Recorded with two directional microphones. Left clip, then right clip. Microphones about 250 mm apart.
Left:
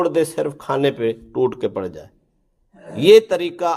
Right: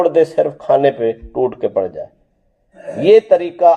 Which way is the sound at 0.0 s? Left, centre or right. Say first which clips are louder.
Right 6 dB; left.